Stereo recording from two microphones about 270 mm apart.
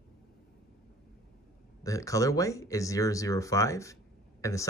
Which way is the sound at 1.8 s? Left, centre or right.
Centre.